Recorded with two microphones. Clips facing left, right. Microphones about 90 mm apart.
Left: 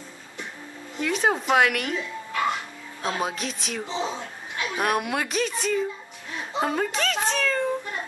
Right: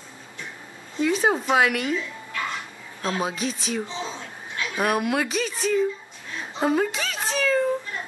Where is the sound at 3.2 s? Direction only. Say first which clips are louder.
Right 2 dB; centre (ahead or behind).